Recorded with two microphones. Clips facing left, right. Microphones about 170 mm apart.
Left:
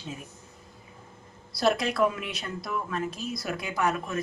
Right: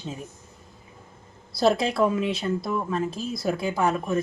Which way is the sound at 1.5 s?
25° right (ahead or behind).